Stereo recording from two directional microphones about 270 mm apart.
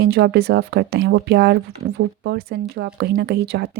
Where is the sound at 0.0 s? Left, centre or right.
Right.